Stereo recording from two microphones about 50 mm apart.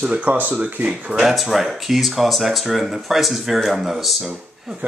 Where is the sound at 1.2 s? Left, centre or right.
Centre.